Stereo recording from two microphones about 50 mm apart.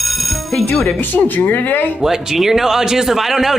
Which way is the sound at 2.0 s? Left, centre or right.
Centre.